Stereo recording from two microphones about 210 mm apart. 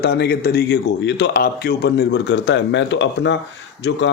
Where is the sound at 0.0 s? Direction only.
50° left (ahead or behind).